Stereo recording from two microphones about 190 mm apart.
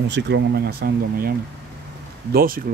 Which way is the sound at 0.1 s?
65° right (ahead or behind).